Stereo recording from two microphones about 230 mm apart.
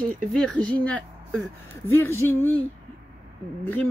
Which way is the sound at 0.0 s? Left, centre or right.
Centre.